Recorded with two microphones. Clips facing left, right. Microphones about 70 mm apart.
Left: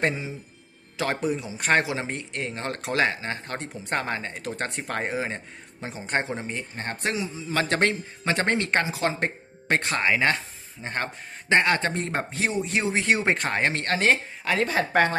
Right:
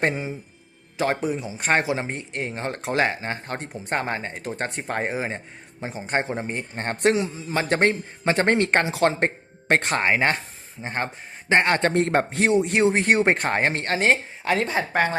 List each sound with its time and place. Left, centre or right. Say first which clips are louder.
0.9 s speech: right 2 dB; right
6.5 s speech: right 4 dB; right
7.3 s a man's voice: right 2 dB; right
10.8 s speech: right 2 dB; right
11.6 s a man's voice: right 4 dB; right
13.8 s speech: right 1 dB; centre